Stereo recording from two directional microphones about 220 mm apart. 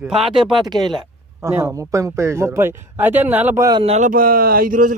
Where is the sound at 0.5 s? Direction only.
20° right (ahead or behind).